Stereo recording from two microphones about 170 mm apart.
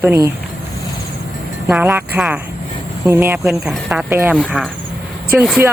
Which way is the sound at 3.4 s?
Centre (ahead or behind).